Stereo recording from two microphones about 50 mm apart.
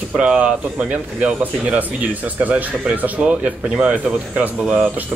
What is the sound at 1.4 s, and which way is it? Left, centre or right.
Speech, right.